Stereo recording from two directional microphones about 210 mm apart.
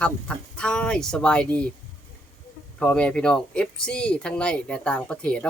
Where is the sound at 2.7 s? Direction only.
5° left (ahead or behind).